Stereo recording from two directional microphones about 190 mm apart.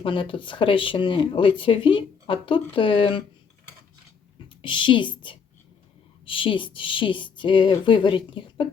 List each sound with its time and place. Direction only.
0.0 s speech: 25° left (ahead or behind)
4.4 s a woman's voice: 25° left (ahead or behind)